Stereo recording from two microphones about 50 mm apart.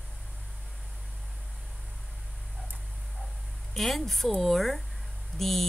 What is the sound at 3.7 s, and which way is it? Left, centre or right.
Speech, centre.